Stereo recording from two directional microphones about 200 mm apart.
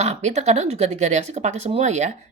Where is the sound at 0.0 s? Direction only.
35° right (ahead or behind).